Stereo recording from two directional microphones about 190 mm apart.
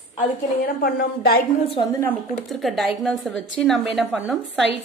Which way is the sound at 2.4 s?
Centre (ahead or behind).